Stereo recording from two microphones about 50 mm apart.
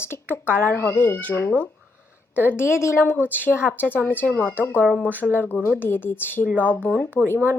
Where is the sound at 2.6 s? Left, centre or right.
Left.